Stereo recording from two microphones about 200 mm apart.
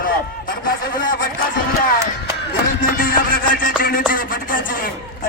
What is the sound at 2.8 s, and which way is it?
Music, 45° left (ahead or behind).